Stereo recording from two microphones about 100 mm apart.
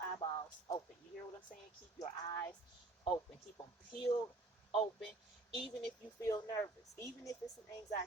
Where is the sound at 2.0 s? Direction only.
40° left (ahead or behind).